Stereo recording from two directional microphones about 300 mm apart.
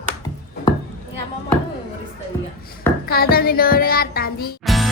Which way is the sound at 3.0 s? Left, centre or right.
Left.